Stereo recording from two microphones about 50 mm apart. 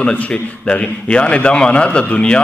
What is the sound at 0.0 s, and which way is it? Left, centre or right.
A man's voice, left.